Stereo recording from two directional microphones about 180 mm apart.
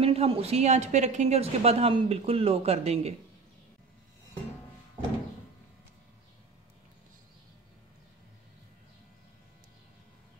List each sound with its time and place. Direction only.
0.0 s a woman's voice: 35° right (ahead or behind)